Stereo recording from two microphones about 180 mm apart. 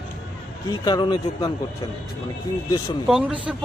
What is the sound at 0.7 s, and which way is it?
Speech, 25° left (ahead or behind).